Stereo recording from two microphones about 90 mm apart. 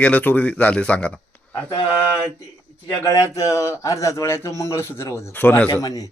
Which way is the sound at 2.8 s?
35° left (ahead or behind).